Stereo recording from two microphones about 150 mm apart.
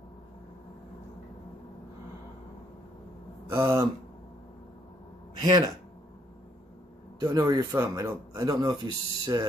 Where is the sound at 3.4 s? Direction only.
20° right (ahead or behind).